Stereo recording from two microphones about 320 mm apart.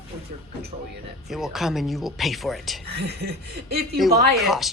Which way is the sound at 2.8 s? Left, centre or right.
Right.